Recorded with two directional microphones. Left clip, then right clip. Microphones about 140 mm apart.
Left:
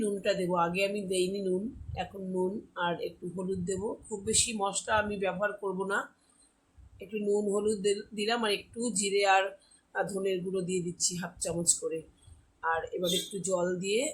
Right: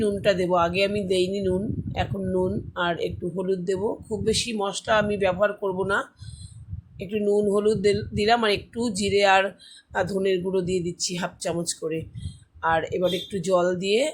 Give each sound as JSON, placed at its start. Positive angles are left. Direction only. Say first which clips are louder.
{"t": 0.0, "sound": "speech", "louder": "right 8 dB", "side_deg": -45}
{"t": 7.1, "sound": "speech", "louder": "right 8 dB", "side_deg": -50}